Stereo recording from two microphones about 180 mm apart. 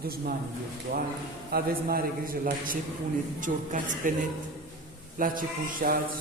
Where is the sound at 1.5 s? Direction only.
55° right (ahead or behind).